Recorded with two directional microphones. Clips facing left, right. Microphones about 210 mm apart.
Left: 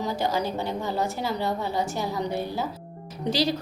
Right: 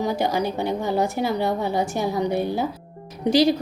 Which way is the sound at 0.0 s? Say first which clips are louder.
Right 4 dB; 15° right (ahead or behind).